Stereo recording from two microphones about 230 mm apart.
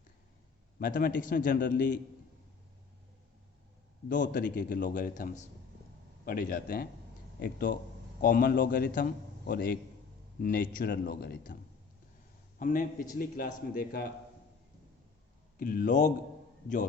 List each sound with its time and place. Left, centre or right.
0.8 s a man's voice: left
4.1 s a man's voice: left
12.5 s a man's voice: left
15.5 s a man's voice: left